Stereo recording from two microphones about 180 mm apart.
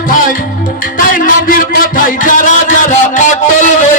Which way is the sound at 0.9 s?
50° left (ahead or behind).